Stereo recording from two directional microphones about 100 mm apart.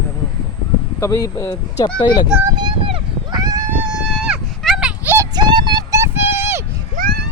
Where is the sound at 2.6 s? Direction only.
55° right (ahead or behind).